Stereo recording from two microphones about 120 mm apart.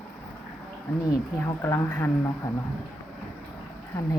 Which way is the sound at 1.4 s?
20° left (ahead or behind).